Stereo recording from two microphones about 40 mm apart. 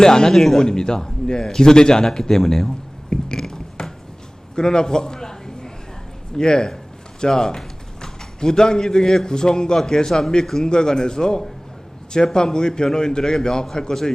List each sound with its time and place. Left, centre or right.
0.0 s a man's voice: centre
3.1 s a sound: centre
6.3 s a man's voice: centre